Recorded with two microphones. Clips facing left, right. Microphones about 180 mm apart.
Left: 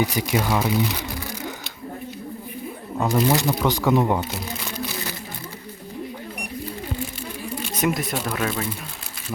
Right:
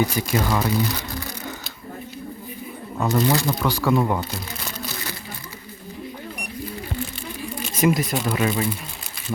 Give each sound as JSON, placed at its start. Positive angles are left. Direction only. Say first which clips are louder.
{"t": 0.0, "sound": "speech", "louder": "even", "side_deg": 15}
{"t": 3.0, "sound": "speech", "louder": "even", "side_deg": 15}
{"t": 7.6, "sound": "speech", "louder": "right 4 dB", "side_deg": 0}